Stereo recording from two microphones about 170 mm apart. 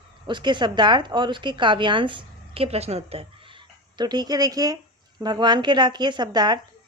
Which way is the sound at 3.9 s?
25° right (ahead or behind).